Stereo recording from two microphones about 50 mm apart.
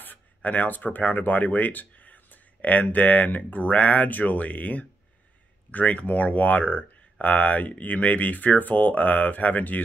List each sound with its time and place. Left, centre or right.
0.0 s speech: left